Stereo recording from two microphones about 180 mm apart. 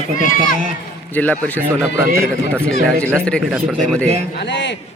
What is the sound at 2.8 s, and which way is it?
Speech, 5° left (ahead or behind).